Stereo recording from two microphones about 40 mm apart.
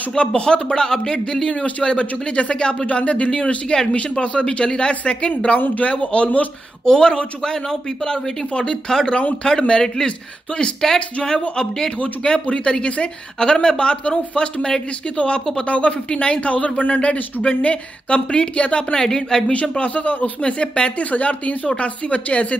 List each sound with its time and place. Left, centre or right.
0.2 s speech: left
6.8 s speech: centre
10.8 s speech: centre
12.0 s speech: left
18.9 s speech: centre
19.8 s speech: left